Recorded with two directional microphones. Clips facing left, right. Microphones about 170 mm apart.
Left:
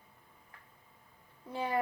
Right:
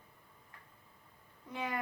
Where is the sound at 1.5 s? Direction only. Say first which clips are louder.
Left 5 dB; 30° left (ahead or behind).